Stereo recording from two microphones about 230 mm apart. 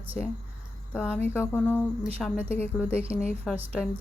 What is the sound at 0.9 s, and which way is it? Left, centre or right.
Speech, centre.